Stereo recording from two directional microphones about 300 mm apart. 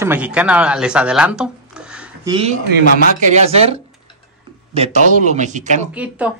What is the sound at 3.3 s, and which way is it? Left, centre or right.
Speech, right.